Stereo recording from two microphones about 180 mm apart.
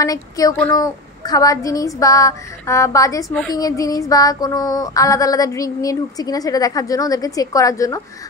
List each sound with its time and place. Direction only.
0.0 s child singing: 20° left (ahead or behind)